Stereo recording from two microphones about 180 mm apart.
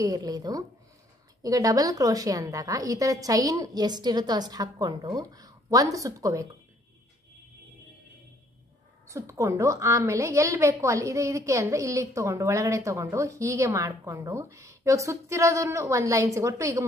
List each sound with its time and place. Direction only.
0.0 s a woman's voice: 20° right (ahead or behind)
9.0 s a woman's voice: 15° right (ahead or behind)